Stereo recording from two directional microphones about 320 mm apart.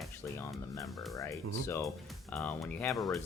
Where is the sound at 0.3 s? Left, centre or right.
Centre.